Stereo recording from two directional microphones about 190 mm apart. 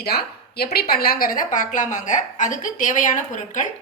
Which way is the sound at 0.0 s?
55° left (ahead or behind).